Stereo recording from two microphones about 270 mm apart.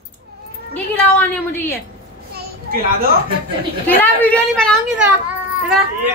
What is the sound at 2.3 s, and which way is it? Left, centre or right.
Children playing, right.